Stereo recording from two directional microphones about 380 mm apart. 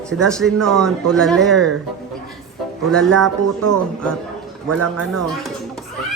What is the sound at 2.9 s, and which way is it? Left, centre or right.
Speech, centre.